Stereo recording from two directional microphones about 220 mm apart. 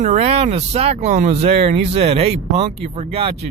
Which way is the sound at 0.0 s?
30° right (ahead or behind).